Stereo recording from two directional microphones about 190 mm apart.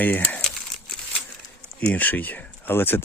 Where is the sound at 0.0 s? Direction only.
10° left (ahead or behind).